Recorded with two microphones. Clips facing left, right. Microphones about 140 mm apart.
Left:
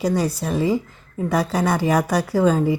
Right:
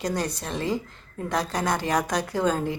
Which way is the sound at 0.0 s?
10° left (ahead or behind).